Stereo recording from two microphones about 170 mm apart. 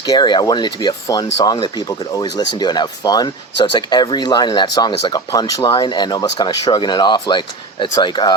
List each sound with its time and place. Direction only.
0.0 s speech: 25° left (ahead or behind)